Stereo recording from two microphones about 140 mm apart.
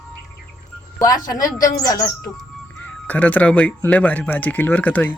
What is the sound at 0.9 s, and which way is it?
A woman's voice, 25° left (ahead or behind).